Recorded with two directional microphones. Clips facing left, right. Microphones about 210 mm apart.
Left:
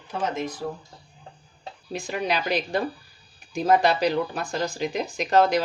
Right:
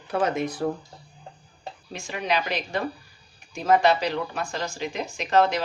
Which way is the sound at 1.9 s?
35° left (ahead or behind).